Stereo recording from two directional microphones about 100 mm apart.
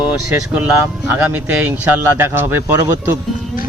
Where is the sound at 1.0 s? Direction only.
20° right (ahead or behind).